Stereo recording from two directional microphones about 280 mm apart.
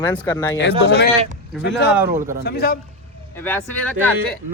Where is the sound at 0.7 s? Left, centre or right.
Right.